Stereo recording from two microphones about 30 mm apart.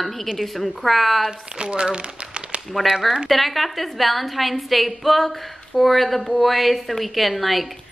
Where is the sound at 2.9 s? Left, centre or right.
Centre.